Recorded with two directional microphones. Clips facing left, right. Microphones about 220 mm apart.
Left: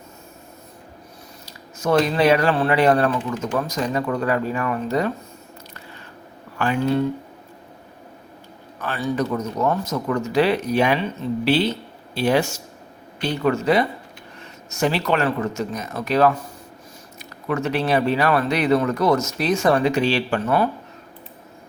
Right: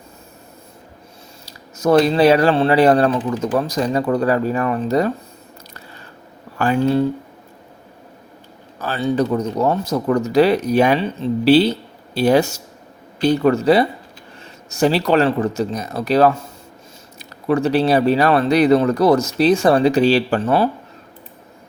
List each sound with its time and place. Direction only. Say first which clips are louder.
1.5 s speech: right 5 dB; 35° right (ahead or behind)
6.6 s speech: right 4 dB; 35° right (ahead or behind)
8.8 s speech: right 5 dB; 25° right (ahead or behind)